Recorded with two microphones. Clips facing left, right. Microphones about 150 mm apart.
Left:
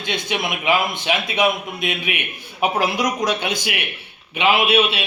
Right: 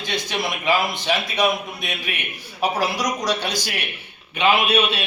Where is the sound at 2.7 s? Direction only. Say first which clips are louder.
Left 3 dB; 55° left (ahead or behind).